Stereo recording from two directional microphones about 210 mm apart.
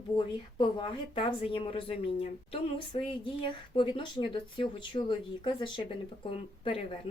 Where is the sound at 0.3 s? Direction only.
25° left (ahead or behind).